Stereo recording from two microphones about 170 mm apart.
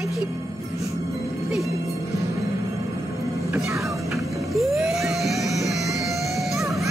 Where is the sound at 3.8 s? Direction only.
Centre (ahead or behind).